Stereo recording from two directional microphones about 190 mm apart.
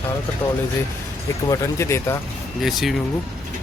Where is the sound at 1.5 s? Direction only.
15° left (ahead or behind).